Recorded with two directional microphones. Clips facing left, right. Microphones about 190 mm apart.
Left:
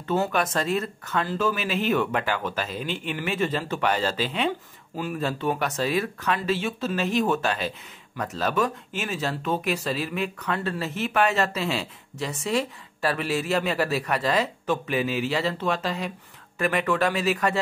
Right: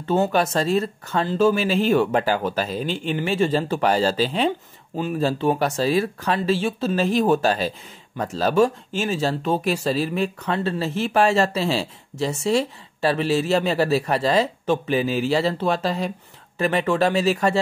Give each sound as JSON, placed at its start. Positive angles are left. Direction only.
{"t": 0.0, "sound": "speech", "side_deg": -30}